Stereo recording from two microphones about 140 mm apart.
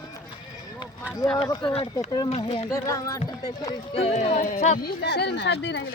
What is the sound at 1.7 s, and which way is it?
Speech, 45° left (ahead or behind).